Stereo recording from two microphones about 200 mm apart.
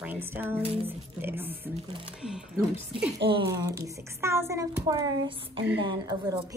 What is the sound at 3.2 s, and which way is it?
A child's voice, 25° right (ahead or behind).